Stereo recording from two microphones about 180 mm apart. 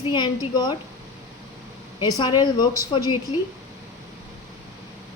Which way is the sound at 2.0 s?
25° left (ahead or behind).